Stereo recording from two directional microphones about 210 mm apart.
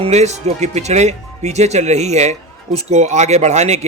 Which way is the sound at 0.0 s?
30° right (ahead or behind).